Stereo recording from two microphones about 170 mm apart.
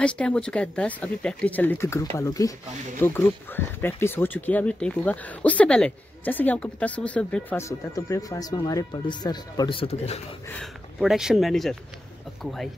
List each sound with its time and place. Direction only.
0.0 s speech: 5° left (ahead or behind); by 10.2 s 35° left (ahead or behind)
10.5 s speech: centre (ahead or behind)